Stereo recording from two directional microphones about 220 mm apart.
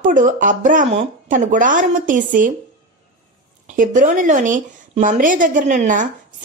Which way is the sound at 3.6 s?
35° right (ahead or behind).